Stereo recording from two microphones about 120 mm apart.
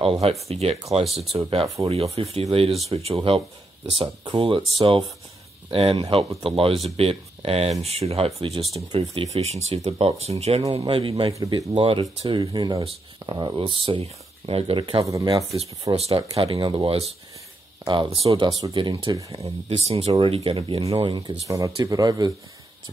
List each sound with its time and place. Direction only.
0.0 s speech: 60° right (ahead or behind)
1.0 s speech: centre (ahead or behind)
1.3 s speech: 55° right (ahead or behind)
10.8 s speech: 45° right (ahead or behind)
11.3 s speech: 30° right (ahead or behind)
11.7 s speech: 50° right (ahead or behind)
15.0 s speech: 30° right (ahead or behind)
16.0 s speech: 55° right (ahead or behind); by 18.1 s 40° right (ahead or behind)
18.1 s speech: 55° right (ahead or behind)
19.3 s speech: 60° right (ahead or behind)
21.0 s speech: 40° right (ahead or behind)
21.5 s speech: 25° right (ahead or behind)